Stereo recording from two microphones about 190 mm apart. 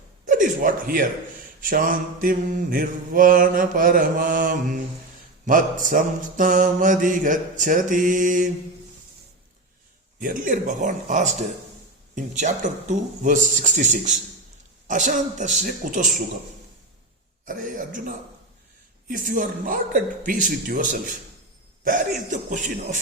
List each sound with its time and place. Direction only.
0.3 s a sound: 45° right (ahead or behind)
1.6 s mantra: 45° right (ahead or behind)
10.2 s mantra: 45° right (ahead or behind)
12.1 s speech: 40° right (ahead or behind)
17.4 s mantra: 45° right (ahead or behind)
21.8 s speech: 40° right (ahead or behind)